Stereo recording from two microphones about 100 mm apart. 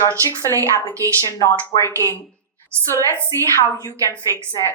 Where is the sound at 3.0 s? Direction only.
35° right (ahead or behind).